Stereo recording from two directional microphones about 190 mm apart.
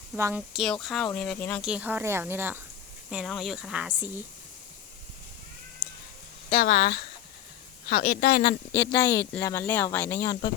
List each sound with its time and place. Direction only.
0.2 s speech: 10° right (ahead or behind); by 1.6 s 5° left (ahead or behind)
1.6 s a woman's voice: 5° right (ahead or behind)
6.5 s speech: 50° left (ahead or behind)
8.9 s speech: 15° left (ahead or behind)